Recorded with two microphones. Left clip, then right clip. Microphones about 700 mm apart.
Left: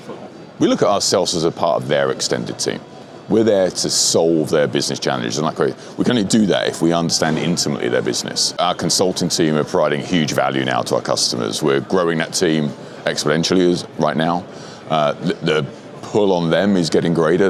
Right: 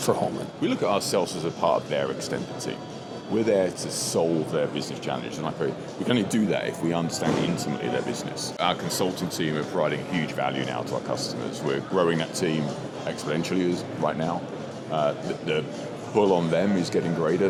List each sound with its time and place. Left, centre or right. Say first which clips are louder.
0.6 s a man's voice: left 10 dB; left